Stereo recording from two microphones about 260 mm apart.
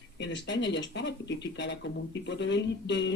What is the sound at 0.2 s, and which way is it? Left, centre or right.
Speech, left.